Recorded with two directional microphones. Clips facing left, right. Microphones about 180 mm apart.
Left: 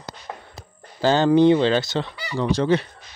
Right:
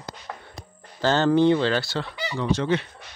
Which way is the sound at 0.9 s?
15° left (ahead or behind).